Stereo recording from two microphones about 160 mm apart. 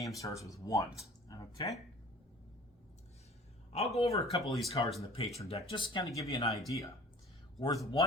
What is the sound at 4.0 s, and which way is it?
Speech, 40° left (ahead or behind).